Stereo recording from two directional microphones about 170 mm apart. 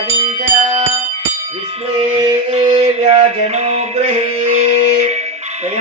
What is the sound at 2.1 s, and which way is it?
Music, 35° right (ahead or behind).